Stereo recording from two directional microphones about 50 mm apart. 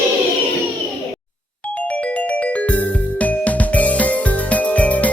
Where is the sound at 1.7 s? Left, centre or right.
Left.